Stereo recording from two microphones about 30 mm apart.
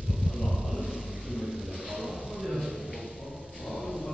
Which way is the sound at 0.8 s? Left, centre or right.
Centre.